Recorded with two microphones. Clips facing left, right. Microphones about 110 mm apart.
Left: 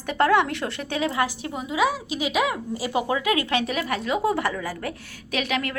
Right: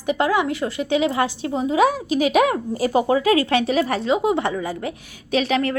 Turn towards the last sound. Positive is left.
turn(degrees=-30)  # may be behind; listen again after turning